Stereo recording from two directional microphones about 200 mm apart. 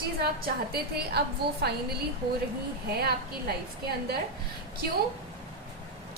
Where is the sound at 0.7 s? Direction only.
55° right (ahead or behind).